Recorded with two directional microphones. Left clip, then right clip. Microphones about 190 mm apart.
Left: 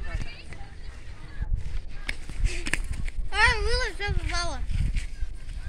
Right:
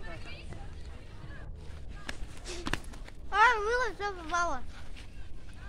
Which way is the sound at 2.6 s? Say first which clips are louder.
Left 6 dB; 25° left (ahead or behind).